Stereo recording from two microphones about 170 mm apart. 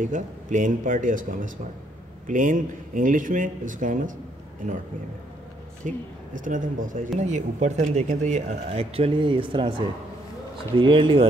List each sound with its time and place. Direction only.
0.0 s speech: 50° right (ahead or behind)
5.9 s speech: 50° right (ahead or behind); by 11.2 s 30° right (ahead or behind)